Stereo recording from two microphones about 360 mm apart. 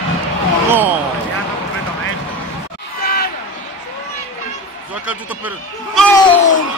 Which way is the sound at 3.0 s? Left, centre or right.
Left.